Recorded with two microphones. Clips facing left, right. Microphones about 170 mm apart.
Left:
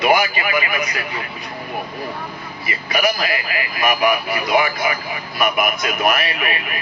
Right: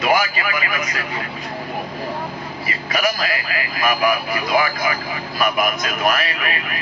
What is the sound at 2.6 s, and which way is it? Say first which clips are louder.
Speech: left 2 dB; 35° right (ahead or behind).